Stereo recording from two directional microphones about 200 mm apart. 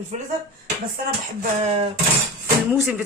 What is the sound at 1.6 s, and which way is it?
Speech, 30° right (ahead or behind).